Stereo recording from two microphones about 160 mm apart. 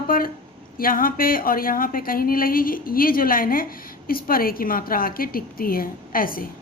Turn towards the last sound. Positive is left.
turn(degrees=65)  # may be behind; listen again after turning